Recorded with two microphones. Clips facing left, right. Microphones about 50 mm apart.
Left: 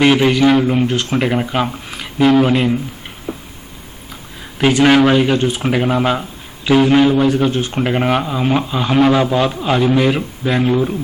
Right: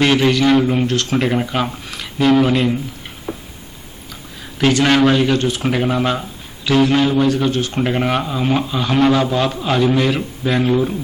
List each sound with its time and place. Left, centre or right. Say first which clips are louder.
0.0 s speech: left 2 dB; centre
4.5 s speech: left 3 dB; centre